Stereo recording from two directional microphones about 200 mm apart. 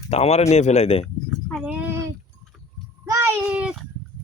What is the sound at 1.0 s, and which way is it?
Livestock, 5° left (ahead or behind).